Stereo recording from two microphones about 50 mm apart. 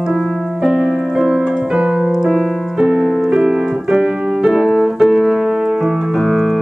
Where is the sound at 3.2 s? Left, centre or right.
Centre.